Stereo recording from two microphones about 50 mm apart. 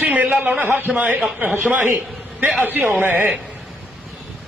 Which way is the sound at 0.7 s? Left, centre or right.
Right.